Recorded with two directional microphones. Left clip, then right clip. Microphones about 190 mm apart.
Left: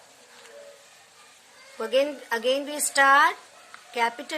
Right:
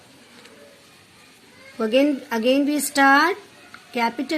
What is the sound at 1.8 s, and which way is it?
A woman's voice, 15° right (ahead or behind).